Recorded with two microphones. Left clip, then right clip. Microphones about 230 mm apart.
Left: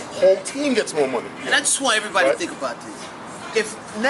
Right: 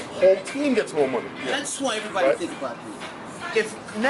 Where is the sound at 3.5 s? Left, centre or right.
Centre.